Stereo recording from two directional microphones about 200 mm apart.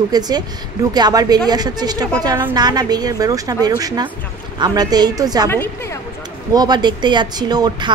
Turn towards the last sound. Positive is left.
turn(degrees=-20)  # may be behind; listen again after turning